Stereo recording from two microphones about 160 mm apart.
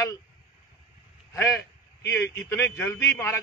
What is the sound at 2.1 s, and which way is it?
A man's voice, 15° left (ahead or behind).